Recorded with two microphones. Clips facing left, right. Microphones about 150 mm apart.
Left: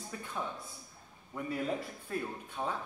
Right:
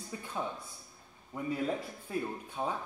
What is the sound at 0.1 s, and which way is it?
Speech, 20° right (ahead or behind).